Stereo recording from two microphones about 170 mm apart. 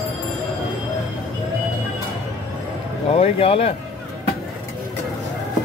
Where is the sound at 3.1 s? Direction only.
35° left (ahead or behind).